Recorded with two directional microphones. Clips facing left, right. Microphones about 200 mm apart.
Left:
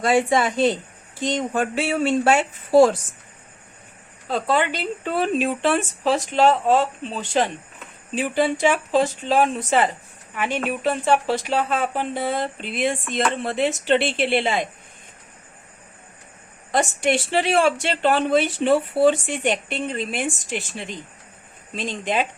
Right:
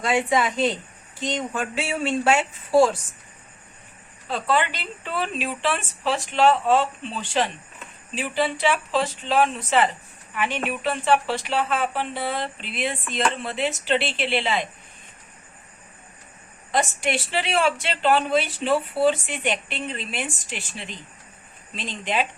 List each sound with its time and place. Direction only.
0.0 s speech: 35° left (ahead or behind)
1.2 s speech: 45° left (ahead or behind)
4.3 s speech: 40° left (ahead or behind)
16.7 s speech: 50° left (ahead or behind)